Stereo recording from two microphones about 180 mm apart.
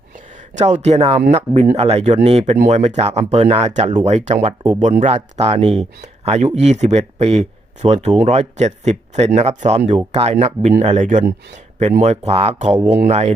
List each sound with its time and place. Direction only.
0.3 s speech: 40° right (ahead or behind)